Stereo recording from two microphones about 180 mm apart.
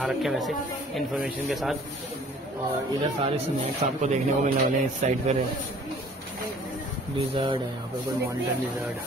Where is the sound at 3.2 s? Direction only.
35° right (ahead or behind).